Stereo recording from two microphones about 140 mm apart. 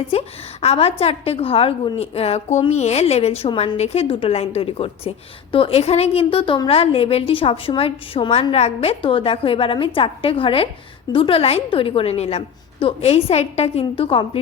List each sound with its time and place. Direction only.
0.1 s a woman's voice: 45° left (ahead or behind)